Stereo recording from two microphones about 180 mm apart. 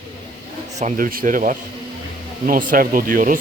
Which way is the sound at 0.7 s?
45° right (ahead or behind).